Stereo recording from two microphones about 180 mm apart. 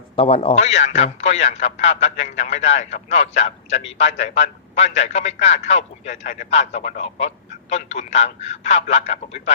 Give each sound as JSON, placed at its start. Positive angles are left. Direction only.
{"t": 0.2, "sound": "a man's voice", "side_deg": 30}